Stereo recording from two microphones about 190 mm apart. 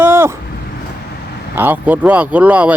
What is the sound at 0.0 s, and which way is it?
Vehicle, 10° right (ahead or behind).